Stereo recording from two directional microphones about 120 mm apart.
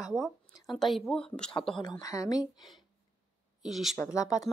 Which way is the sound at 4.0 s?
25° left (ahead or behind).